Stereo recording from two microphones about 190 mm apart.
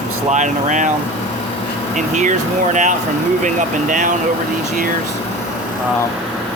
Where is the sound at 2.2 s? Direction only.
40° right (ahead or behind).